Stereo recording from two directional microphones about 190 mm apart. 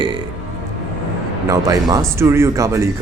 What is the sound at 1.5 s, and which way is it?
Speech, 20° right (ahead or behind).